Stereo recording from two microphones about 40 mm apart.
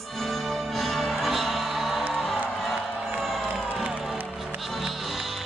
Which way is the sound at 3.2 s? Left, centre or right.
Centre.